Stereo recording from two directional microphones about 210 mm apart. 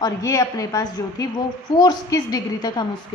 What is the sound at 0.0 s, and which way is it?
A woman's voice, 15° left (ahead or behind).